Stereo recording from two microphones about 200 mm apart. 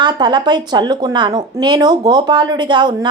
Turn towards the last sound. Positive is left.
turn(degrees=-20)  # may be behind; listen again after turning